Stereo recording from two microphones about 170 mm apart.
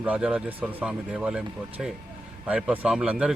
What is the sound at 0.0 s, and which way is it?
A man's voice, 10° right (ahead or behind).